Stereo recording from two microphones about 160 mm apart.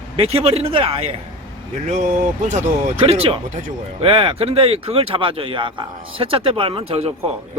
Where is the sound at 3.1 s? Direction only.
35° right (ahead or behind).